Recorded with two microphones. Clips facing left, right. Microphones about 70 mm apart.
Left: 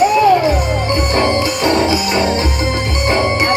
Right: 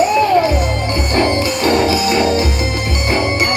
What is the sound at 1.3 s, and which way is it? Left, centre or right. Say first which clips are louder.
Music: even; left.